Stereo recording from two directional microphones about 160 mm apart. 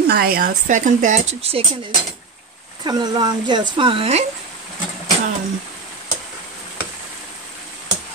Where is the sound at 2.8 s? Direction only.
25° right (ahead or behind).